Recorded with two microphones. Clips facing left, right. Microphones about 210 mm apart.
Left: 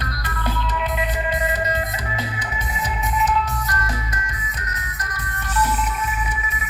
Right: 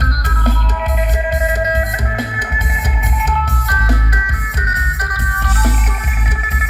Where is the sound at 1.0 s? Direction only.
45° right (ahead or behind).